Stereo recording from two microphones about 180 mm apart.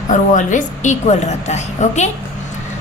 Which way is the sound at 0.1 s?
45° left (ahead or behind).